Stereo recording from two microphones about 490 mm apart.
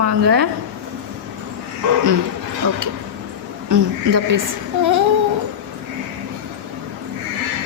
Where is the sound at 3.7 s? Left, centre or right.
Right.